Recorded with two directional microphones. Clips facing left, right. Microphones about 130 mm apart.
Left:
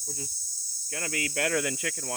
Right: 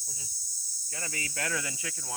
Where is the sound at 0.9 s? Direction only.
65° left (ahead or behind).